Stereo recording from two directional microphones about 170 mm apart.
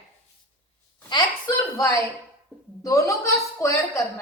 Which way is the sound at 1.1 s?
25° left (ahead or behind).